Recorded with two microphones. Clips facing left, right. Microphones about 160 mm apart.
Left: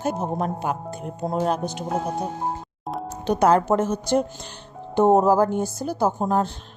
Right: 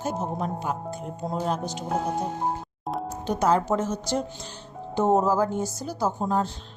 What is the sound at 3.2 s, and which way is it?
Speech, 65° left (ahead or behind).